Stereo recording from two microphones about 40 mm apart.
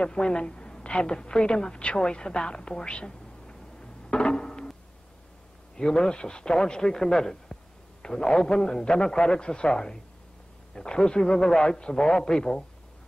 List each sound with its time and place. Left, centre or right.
0.0 s a woman's voice: left
5.8 s a man's voice: centre